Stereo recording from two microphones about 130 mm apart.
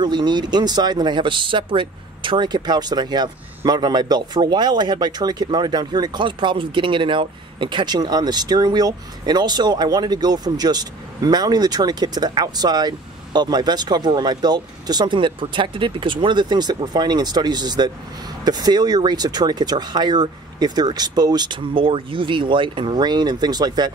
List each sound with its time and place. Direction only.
0.0 s speech: 35° right (ahead or behind)